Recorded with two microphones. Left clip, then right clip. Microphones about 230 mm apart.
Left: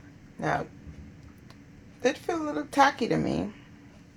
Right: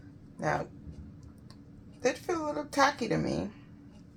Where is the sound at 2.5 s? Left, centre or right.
Left.